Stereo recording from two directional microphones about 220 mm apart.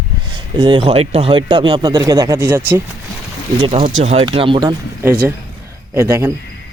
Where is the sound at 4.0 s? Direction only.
25° right (ahead or behind).